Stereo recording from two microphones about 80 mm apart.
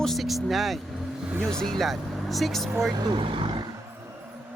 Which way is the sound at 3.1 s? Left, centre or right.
Right.